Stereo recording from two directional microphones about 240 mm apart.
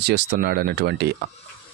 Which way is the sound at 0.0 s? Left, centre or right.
Right.